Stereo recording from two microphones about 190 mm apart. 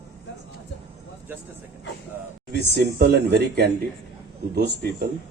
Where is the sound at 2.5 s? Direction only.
60° right (ahead or behind).